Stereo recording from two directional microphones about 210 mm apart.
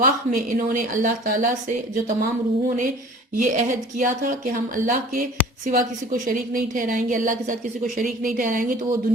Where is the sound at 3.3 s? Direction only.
40° right (ahead or behind).